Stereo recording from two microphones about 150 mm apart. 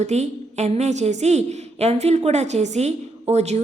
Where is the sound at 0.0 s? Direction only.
50° right (ahead or behind).